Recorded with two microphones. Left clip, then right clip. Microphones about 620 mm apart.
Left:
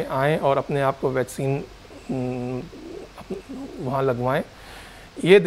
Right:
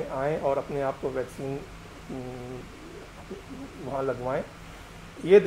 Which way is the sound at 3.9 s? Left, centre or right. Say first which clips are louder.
Left 6 dB; left.